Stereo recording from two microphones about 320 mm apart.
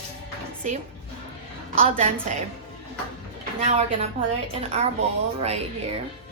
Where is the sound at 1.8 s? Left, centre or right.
Right.